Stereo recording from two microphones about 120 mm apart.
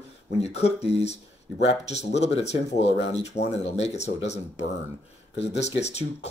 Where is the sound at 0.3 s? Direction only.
60° left (ahead or behind).